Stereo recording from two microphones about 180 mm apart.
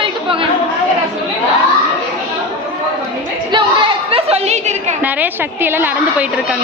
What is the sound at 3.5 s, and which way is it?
Chatter, 30° right (ahead or behind).